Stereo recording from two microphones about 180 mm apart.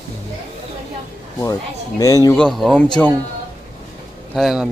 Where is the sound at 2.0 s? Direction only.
20° left (ahead or behind).